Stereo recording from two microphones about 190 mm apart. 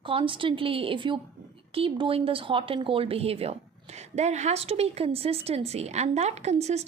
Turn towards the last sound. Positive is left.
turn(degrees=-35)  # may be behind; listen again after turning